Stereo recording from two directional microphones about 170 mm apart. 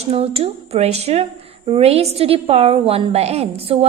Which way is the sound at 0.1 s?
35° right (ahead or behind).